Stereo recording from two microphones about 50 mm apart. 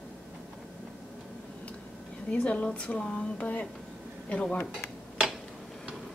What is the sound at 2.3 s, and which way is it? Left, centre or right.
Speech, left.